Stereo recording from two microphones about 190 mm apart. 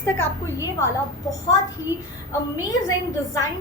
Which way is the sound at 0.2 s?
15° left (ahead or behind).